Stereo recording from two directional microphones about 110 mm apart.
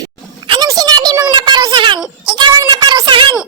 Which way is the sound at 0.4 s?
45° right (ahead or behind).